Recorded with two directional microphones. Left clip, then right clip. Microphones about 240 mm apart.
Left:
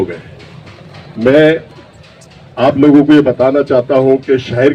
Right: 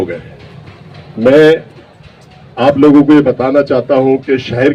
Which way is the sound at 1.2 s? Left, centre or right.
Right.